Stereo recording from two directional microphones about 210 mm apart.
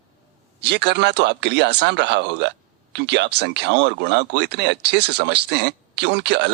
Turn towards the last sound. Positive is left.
turn(degrees=-55)  # may be behind; listen again after turning